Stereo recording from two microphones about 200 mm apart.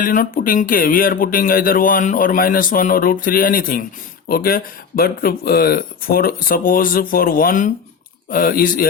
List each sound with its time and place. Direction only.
0.0 s speech: 45° left (ahead or behind)